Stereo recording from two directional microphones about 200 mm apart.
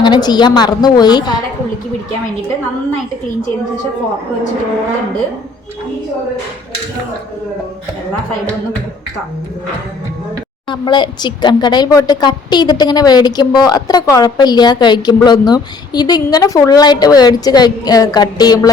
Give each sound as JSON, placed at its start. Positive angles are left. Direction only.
{"t": 0.0, "sound": "a woman's voice", "side_deg": 20}
{"t": 10.7, "sound": "a woman's voice", "side_deg": 20}